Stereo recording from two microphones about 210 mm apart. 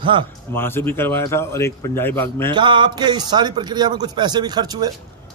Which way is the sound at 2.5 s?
20° right (ahead or behind).